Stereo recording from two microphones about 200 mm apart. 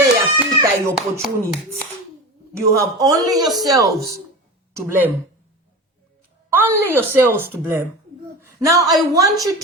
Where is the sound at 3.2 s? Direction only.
20° right (ahead or behind).